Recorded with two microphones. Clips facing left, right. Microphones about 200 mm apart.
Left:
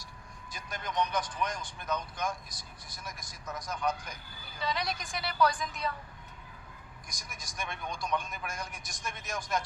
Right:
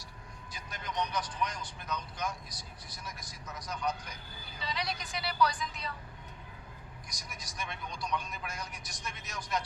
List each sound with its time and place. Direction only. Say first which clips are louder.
0.5 s speech: left 3 dB; 50° left (ahead or behind)
7.1 s speech: left 1 dB; 50° left (ahead or behind)